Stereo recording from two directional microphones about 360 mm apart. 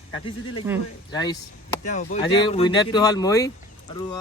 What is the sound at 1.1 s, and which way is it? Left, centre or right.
Speech, centre.